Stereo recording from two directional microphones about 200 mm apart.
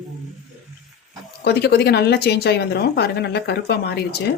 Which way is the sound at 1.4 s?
55° left (ahead or behind).